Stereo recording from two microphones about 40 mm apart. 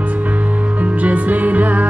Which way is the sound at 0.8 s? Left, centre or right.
Right.